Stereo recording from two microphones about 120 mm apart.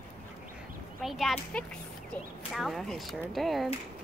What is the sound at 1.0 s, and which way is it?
Speech, centre (ahead or behind).